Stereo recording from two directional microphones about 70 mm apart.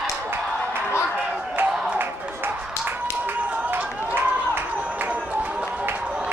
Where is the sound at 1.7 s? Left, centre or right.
Centre.